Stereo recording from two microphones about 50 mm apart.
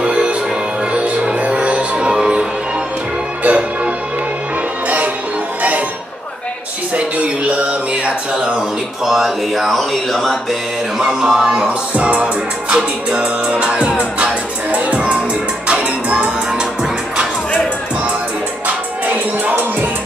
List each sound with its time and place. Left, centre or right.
0.0 s music: right
3.4 s music: right
7.0 s music: right
8.5 s speech: centre
11.0 s music: centre
11.6 s music: right